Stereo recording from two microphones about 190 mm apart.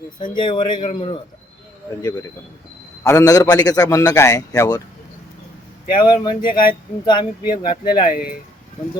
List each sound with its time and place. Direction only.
0.2 s speech: 25° left (ahead or behind)
3.0 s a man's voice: 15° left (ahead or behind)
5.9 s speech: 25° left (ahead or behind)
6.5 s speech: 50° left (ahead or behind)
7.0 s speech: 25° left (ahead or behind)
8.1 s speech: 50° left (ahead or behind)